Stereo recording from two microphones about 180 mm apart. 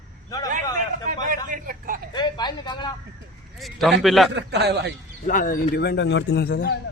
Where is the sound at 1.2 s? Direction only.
50° right (ahead or behind).